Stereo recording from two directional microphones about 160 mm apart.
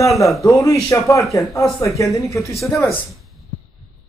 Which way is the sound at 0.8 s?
20° left (ahead or behind).